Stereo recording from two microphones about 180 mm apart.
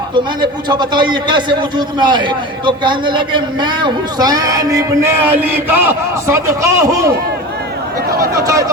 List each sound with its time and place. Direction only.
0.7 s a man's voice: 25° right (ahead or behind)
8.4 s speech: 20° right (ahead or behind)